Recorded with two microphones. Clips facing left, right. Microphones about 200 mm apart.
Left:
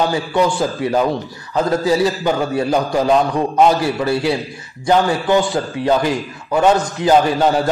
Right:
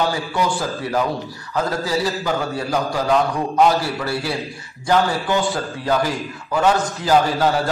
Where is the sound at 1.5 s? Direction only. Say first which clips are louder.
Left 6 dB; 25° left (ahead or behind).